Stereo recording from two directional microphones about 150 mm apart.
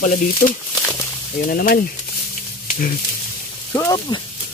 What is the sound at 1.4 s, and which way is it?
Speech, 80° left.